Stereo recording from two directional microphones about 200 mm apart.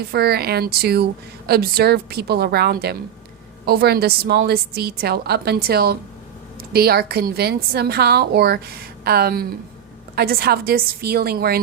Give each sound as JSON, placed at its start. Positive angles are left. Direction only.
{"t": 0.0, "sound": "a woman's voice", "side_deg": -55}